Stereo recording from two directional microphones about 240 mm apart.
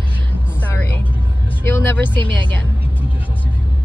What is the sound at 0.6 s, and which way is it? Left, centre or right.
Speech, centre.